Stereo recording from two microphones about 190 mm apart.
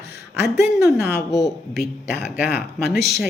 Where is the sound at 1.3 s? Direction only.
20° left (ahead or behind).